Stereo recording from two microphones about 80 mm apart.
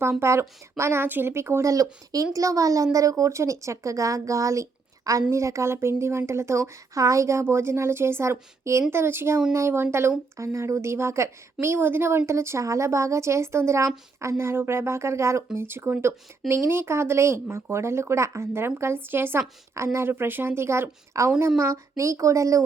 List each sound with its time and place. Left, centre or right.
0.0 s a woman's voice: right